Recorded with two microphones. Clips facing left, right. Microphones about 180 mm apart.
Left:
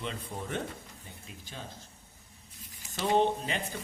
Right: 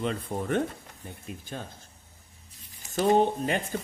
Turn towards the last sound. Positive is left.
turn(degrees=-50)  # may be behind; listen again after turning